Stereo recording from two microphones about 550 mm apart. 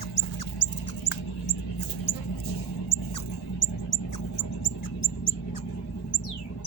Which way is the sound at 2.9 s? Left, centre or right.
Left.